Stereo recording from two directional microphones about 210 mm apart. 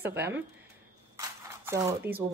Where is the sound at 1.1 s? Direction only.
15° right (ahead or behind).